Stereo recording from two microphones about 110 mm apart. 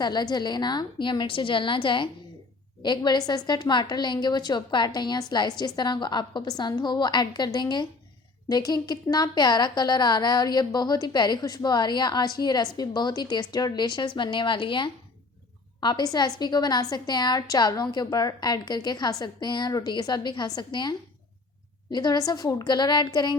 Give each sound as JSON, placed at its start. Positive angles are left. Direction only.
{"t": 0.0, "sound": "a woman's voice", "side_deg": 40}
{"t": 21.9, "sound": "a woman's voice", "side_deg": 40}